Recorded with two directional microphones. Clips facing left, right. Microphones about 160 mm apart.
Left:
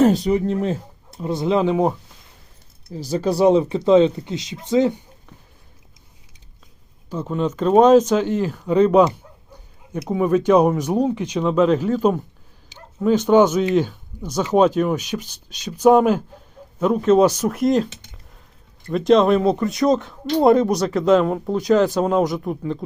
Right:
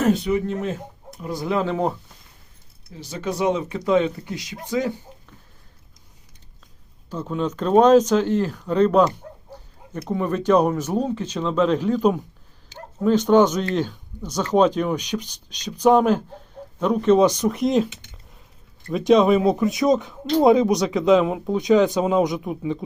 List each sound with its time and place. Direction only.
0.0 s speech: 35° left (ahead or behind); by 1.9 s 15° left (ahead or behind)
2.9 s speech: 35° left (ahead or behind)
7.1 s speech: 5° left (ahead or behind)
18.9 s speech: centre (ahead or behind)